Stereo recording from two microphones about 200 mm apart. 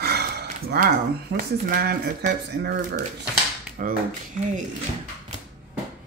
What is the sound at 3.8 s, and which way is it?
Speech, 45° right (ahead or behind).